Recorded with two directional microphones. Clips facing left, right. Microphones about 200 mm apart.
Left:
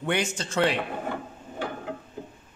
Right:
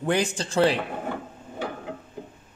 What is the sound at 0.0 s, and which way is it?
Speech, 35° right (ahead or behind).